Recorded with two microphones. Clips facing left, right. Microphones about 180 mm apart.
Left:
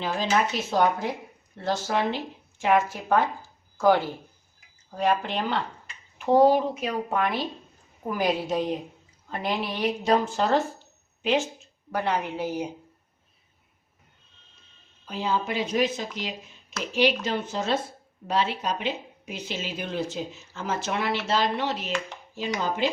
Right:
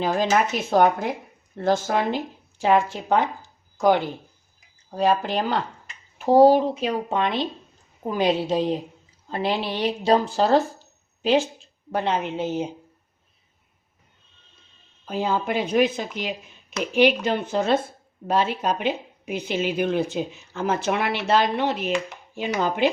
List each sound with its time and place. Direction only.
0.0 s speech: 45° right (ahead or behind); by 4.2 s 20° right (ahead or behind)
4.9 s a woman's voice: 35° right (ahead or behind)
15.0 s speech: 50° right (ahead or behind)